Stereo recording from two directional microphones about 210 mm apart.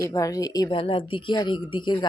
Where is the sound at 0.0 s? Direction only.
15° left (ahead or behind).